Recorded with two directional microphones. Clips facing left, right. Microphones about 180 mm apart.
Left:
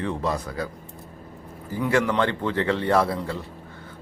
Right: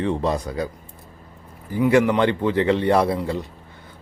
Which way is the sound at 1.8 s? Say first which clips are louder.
Right 5 dB; 15° right (ahead or behind).